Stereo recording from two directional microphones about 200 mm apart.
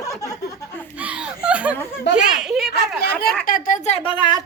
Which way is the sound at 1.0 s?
5° right (ahead or behind).